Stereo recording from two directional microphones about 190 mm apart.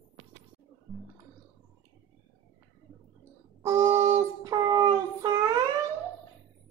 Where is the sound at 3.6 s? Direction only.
15° right (ahead or behind).